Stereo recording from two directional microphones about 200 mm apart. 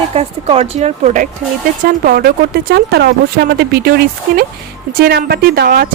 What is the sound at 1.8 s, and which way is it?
Speech, 45° right (ahead or behind).